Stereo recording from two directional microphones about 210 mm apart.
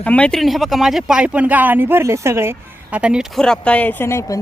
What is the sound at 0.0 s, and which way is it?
Speech, 5° left (ahead or behind).